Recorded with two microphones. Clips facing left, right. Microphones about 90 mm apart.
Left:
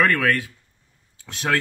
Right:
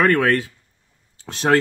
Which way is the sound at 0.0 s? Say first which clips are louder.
Right 3 dB; 30° right (ahead or behind).